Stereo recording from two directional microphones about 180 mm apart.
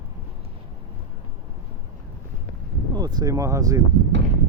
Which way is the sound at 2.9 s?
20° right (ahead or behind).